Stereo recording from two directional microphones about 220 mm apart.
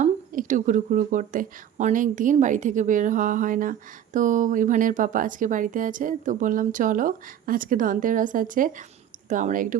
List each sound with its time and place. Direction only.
0.0 s a woman's voice: 35° right (ahead or behind)